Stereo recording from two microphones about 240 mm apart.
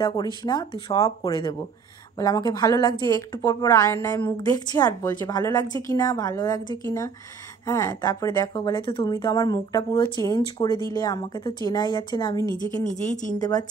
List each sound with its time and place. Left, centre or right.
0.0 s a woman's voice: centre
12.8 s speech: left
13.4 s a woman's voice: centre